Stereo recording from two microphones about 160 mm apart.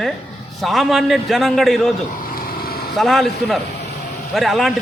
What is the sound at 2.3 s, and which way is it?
Vehicle, 70° left (ahead or behind).